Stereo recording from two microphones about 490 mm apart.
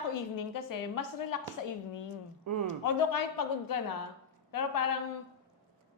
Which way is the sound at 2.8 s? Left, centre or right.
Left.